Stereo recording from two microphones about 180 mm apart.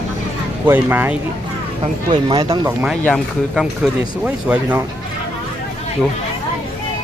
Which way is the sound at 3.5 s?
Centre (ahead or behind).